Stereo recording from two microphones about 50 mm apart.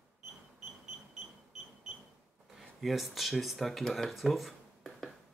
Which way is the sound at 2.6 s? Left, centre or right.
Centre.